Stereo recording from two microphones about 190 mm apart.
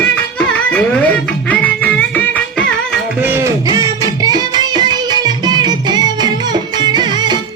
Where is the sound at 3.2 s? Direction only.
15° right (ahead or behind).